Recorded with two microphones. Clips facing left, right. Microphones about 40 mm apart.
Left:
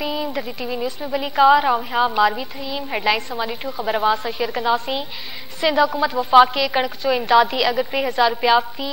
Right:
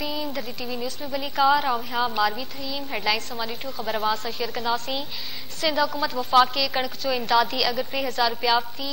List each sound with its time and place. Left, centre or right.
0.0 s a woman's voice: centre